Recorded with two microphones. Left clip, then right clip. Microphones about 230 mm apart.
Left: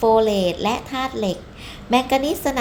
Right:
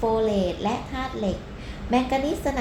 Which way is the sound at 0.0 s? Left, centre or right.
Left.